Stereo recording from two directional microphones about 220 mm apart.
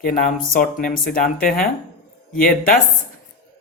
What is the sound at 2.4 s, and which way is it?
Speech, 40° left (ahead or behind).